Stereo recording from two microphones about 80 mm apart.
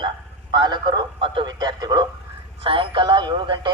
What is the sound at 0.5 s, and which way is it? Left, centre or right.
Speech, right.